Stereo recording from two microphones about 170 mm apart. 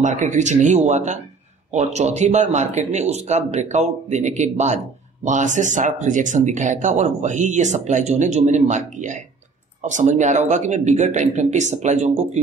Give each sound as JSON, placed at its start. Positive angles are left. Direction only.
{"t": 0.0, "sound": "speech", "side_deg": -45}